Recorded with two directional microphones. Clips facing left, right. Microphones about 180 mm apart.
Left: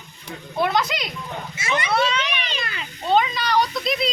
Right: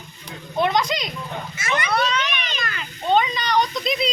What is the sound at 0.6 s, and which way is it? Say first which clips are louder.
Speech: right 1 dB; 5° left (ahead or behind).